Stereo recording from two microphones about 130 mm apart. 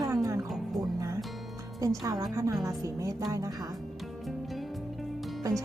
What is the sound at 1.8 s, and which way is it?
A woman's voice, 25° right (ahead or behind).